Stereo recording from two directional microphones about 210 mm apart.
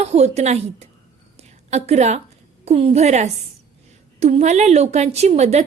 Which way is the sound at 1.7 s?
30° right (ahead or behind).